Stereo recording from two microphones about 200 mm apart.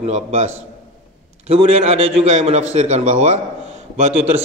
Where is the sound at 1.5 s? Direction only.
30° right (ahead or behind).